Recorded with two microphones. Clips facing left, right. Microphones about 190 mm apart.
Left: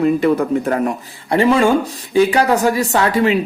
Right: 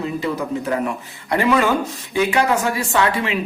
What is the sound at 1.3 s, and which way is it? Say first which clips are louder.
Speech: left 4 dB; 30° left (ahead or behind).